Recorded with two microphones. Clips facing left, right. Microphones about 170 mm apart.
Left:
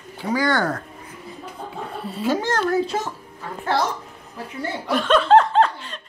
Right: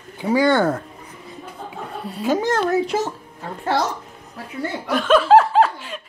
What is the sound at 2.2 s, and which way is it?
Speech, 20° right (ahead or behind).